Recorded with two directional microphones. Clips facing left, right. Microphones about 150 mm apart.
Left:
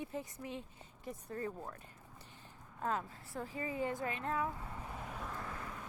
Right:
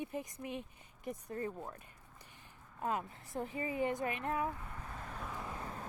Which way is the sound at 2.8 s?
15° right (ahead or behind).